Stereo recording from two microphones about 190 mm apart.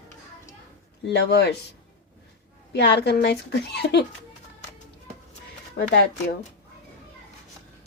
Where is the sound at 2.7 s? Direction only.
60° left (ahead or behind).